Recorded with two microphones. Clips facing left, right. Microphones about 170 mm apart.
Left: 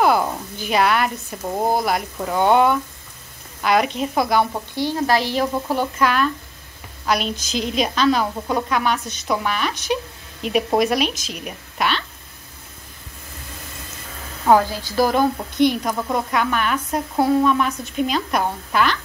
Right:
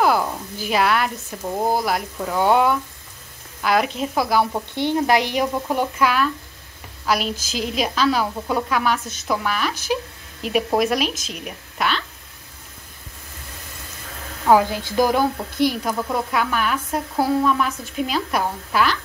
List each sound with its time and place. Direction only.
0.0 s speech: centre (ahead or behind)
4.7 s a woman's voice: 20° right (ahead or behind); by 12.0 s centre (ahead or behind)
14.7 s a woman's voice: 20° right (ahead or behind)
15.3 s speech: 5° right (ahead or behind)